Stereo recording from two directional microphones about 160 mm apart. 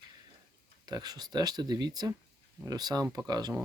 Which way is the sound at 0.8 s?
25° right (ahead or behind).